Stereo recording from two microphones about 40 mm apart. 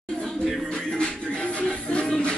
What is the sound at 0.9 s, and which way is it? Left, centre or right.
Music, left.